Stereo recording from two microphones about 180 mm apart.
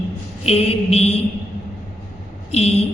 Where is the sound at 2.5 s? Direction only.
35° left (ahead or behind).